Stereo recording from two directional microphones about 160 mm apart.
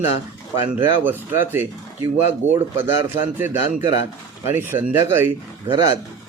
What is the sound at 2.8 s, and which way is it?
Speech, 15° right (ahead or behind).